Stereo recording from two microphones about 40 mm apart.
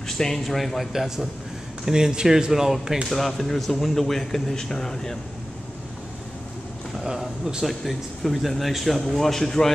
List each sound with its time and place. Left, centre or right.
0.4 s speech: centre
3.1 s speech: centre
7.6 s speech: centre